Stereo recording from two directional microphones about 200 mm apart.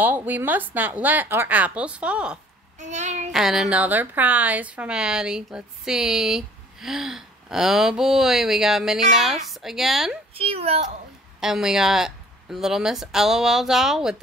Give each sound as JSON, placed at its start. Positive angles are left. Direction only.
{"t": 0.0, "sound": "a woman's voice", "side_deg": -10}
{"t": 2.8, "sound": "a child's voice", "side_deg": -35}
{"t": 3.3, "sound": "a woman's voice", "side_deg": 0}
{"t": 10.3, "sound": "a child's voice", "side_deg": -30}
{"t": 11.4, "sound": "a woman's voice", "side_deg": 0}